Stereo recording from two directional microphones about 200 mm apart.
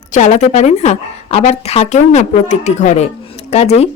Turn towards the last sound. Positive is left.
turn(degrees=30)  # may be behind; listen again after turning